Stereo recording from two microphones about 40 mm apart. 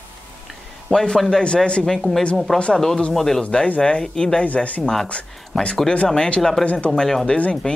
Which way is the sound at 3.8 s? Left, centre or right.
Left.